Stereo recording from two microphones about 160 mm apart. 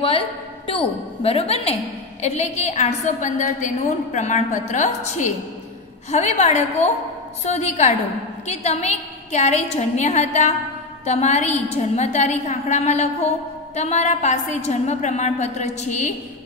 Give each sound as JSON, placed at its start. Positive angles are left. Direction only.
{"t": 0.7, "sound": "a woman's voice", "side_deg": 35}